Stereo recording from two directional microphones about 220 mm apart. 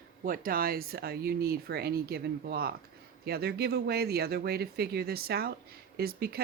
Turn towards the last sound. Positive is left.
turn(degrees=-45)  # may be behind; listen again after turning